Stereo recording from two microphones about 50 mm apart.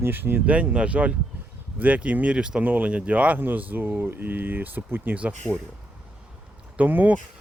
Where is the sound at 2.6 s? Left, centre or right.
Right.